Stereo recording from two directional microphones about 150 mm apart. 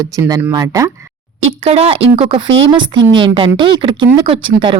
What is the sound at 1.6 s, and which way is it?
A woman's voice, 45° right (ahead or behind).